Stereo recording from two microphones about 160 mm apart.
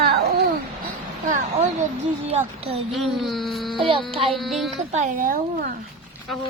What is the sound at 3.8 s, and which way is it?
Speech, 35° right (ahead or behind).